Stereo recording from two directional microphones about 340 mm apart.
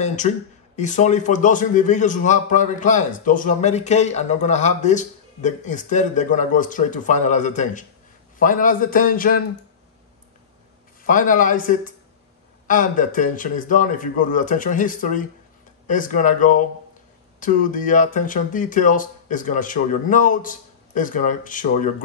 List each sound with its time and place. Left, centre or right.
0.0 s a man's voice: left
11.1 s a man's voice: left